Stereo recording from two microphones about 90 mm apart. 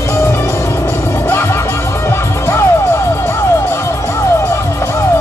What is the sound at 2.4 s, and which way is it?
Music, 30° left (ahead or behind).